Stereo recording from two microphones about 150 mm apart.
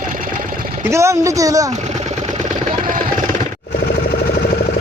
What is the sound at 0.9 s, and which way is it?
Speech, 20° right (ahead or behind).